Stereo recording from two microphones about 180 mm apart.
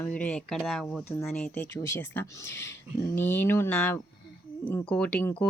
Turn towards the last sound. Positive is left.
turn(degrees=10)  # may be behind; listen again after turning